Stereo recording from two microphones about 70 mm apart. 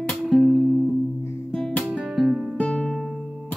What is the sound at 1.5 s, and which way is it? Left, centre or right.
Music, centre.